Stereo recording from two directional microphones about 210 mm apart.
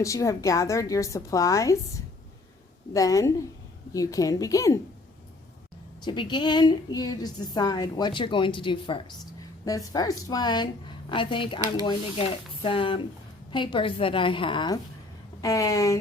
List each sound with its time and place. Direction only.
0.0 s a woman's voice: 15° left (ahead or behind)
2.9 s a woman's voice: 15° left (ahead or behind)
6.0 s a woman's voice: 20° left (ahead or behind)